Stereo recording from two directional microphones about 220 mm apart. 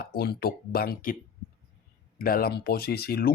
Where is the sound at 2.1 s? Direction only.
40° left (ahead or behind).